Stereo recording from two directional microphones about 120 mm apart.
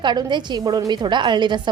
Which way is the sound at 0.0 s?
40° right (ahead or behind).